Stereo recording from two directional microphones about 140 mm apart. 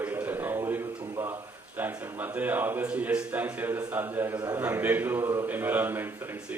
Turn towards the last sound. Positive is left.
turn(degrees=-15)  # may be behind; listen again after turning